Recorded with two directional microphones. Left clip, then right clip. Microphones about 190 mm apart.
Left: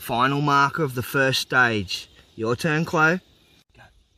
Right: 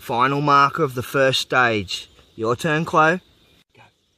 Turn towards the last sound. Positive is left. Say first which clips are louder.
# right 3 dB
turn(degrees=10)  # may be behind; listen again after turning